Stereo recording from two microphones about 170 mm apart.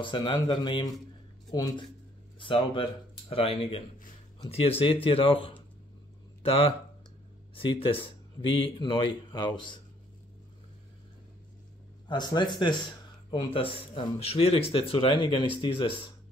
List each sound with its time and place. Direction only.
0.0 s a man's voice: 30° left (ahead or behind)
12.1 s a man's voice: 25° left (ahead or behind)